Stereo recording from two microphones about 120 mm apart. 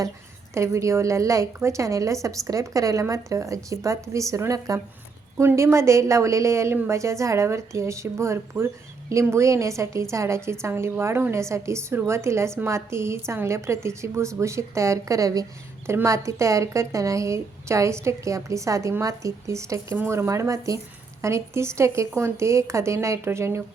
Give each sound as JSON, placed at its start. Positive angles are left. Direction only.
{"t": 0.5, "sound": "a woman's voice", "side_deg": -25}